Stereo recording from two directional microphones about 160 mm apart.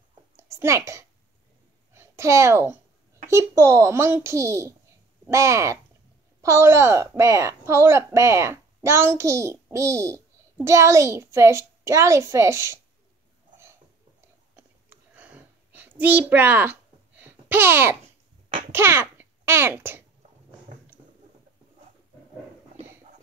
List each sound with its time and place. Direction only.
0.4 s a child's voice: 20° right (ahead or behind)
14.5 s a sound: 10° right (ahead or behind)
17.2 s babbling: 10° right (ahead or behind)
18.7 s a child's voice: 15° right (ahead or behind)